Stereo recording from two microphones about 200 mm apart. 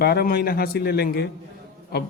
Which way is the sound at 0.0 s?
50° left (ahead or behind).